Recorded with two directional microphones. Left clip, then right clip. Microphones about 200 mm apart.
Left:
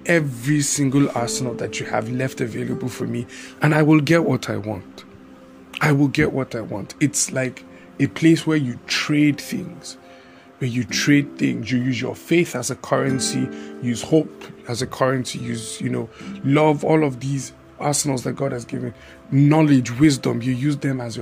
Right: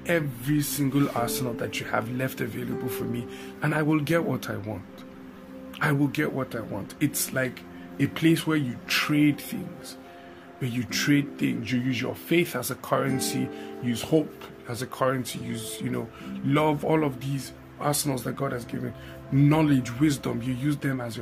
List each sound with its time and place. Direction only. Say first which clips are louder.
0.0 s speech: left 7 dB; 35° left (ahead or behind)
5.8 s speech: left 7 dB; 30° left (ahead or behind)
10.6 s speech: left 6 dB; 25° left (ahead or behind)
14.7 s speech: left 6 dB; 30° left (ahead or behind)